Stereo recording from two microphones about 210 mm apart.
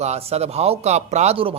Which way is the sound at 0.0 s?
30° right (ahead or behind).